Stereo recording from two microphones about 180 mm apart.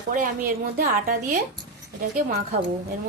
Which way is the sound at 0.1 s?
45° right (ahead or behind).